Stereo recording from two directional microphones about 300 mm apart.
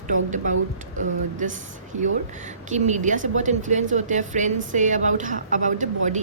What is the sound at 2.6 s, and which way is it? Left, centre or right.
A woman's voice, right.